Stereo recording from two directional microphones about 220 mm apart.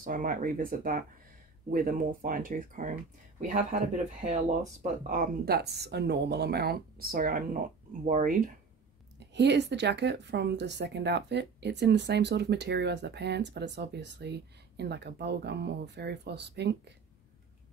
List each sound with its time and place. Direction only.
0.0 s speech: 40° right (ahead or behind)
9.3 s speech: 50° right (ahead or behind)